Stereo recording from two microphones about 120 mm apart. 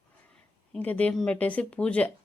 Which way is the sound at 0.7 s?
10° left (ahead or behind).